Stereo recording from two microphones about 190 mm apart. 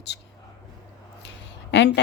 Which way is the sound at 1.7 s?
65° left (ahead or behind).